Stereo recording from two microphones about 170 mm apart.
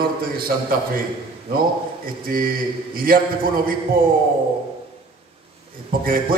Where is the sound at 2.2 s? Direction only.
55° right (ahead or behind).